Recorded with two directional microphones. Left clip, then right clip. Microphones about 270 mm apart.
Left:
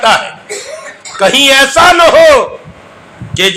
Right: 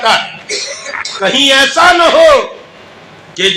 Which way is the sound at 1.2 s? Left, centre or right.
Left.